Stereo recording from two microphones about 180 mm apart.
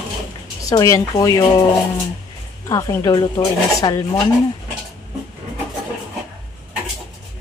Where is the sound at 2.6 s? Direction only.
20° left (ahead or behind).